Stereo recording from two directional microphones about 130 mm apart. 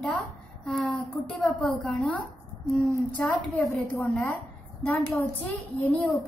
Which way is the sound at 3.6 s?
25° left (ahead or behind).